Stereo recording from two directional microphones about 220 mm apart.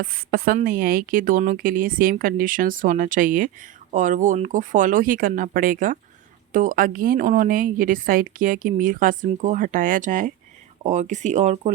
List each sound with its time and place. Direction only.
0.0 s a woman's voice: 45° right (ahead or behind)